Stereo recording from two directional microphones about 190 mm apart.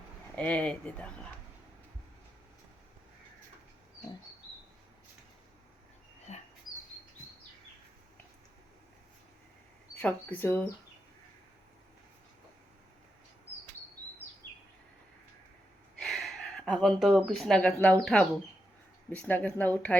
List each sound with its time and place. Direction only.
0.3 s speech: 5° left (ahead or behind)
6.3 s dog: 35° left (ahead or behind)
9.9 s speech: 10° left (ahead or behind)
16.0 s speech: centre (ahead or behind)